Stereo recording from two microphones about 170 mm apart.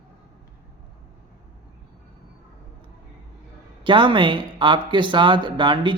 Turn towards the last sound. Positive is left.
turn(degrees=-30)  # may be behind; listen again after turning